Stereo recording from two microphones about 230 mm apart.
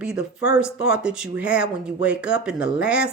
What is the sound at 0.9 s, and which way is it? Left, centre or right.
Speech, centre.